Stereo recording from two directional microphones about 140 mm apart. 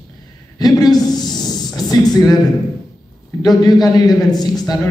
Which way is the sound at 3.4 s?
30° left (ahead or behind).